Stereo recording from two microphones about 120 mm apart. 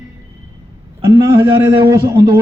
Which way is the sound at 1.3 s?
40° right (ahead or behind).